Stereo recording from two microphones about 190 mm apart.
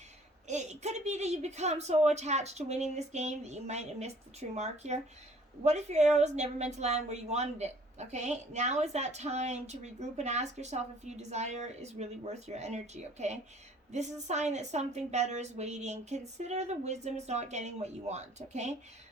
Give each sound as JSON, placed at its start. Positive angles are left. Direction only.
{"t": 0.4, "sound": "a woman's voice", "side_deg": -35}